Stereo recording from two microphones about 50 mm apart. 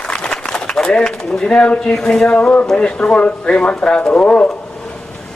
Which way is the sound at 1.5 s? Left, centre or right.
Centre.